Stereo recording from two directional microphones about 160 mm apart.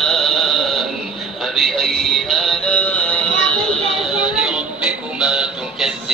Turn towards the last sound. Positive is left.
turn(degrees=-5)  # may be behind; listen again after turning